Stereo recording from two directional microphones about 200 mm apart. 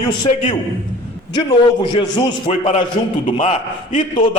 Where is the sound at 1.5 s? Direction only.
25° left (ahead or behind).